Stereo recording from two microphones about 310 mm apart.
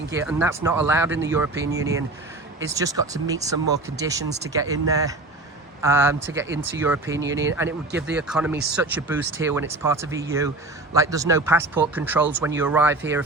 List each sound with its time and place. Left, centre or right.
0.2 s speech: centre
7.2 s speech: right
7.4 s speech: centre